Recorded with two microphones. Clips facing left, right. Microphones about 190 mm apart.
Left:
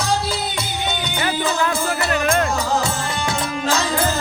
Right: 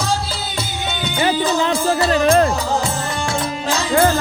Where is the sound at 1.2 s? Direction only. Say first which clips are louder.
Right 5 dB; 25° right (ahead or behind).